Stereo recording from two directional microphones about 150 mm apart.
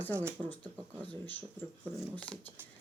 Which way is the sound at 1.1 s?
10° left (ahead or behind).